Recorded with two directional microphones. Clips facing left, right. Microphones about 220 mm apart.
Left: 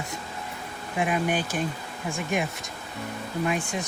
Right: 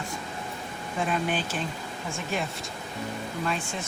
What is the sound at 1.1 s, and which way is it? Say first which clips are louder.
Speech: left 2 dB; 10° left (ahead or behind).